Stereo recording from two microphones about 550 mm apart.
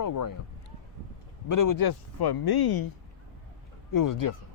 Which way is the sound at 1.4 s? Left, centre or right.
Left.